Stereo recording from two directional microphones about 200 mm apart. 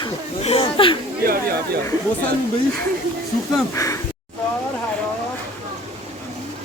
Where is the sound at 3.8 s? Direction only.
15° left (ahead or behind).